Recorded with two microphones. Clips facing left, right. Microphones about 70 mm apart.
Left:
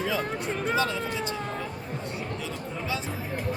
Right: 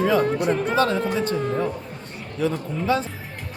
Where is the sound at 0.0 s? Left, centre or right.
Right.